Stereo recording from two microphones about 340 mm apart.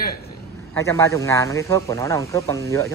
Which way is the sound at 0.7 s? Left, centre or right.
Centre.